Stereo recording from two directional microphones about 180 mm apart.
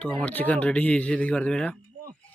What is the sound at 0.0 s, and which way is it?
Speech, 5° left (ahead or behind).